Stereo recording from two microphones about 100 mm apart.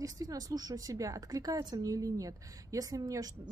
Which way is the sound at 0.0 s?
35° right (ahead or behind).